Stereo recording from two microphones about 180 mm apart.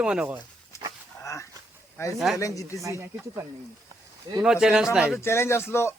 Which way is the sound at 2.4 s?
20° left (ahead or behind).